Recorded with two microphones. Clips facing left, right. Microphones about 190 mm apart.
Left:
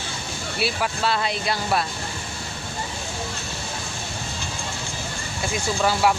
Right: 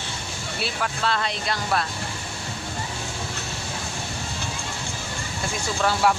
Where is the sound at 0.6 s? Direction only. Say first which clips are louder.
Left 3 dB; 10° left (ahead or behind).